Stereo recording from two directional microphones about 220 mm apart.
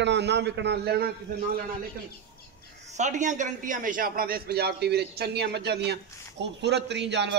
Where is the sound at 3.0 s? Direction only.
35° right (ahead or behind).